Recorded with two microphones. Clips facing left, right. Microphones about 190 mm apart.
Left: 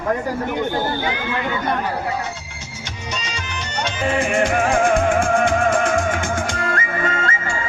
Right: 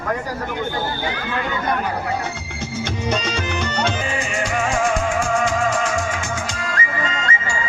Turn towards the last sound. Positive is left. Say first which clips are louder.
# left 1 dB
turn(degrees=55)  # may be behind; listen again after turning